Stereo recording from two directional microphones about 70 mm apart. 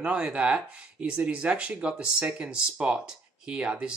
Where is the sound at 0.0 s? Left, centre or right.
Centre.